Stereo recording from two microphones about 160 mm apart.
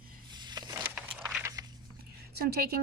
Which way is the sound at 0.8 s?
15° right (ahead or behind).